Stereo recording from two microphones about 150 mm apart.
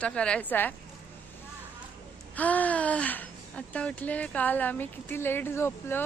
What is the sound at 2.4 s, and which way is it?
Speech, 10° left (ahead or behind).